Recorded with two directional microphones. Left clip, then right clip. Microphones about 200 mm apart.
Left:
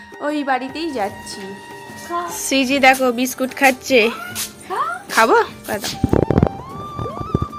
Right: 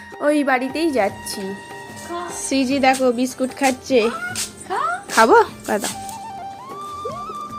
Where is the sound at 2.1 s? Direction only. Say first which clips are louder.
Left 4 dB; centre (ahead or behind).